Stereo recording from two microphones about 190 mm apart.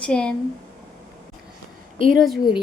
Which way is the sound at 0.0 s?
5° left (ahead or behind).